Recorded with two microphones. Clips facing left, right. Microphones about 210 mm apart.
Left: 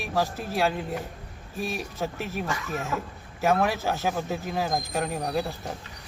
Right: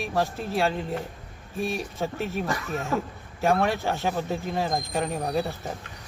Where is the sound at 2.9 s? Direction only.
40° right (ahead or behind).